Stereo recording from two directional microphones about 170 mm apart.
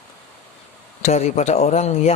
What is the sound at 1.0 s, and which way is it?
Speech, 40° left (ahead or behind).